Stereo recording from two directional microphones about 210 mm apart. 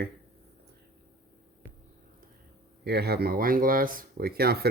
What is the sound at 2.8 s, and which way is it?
Speech, 50° right (ahead or behind).